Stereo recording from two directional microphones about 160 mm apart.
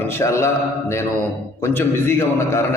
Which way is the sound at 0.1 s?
15° left (ahead or behind).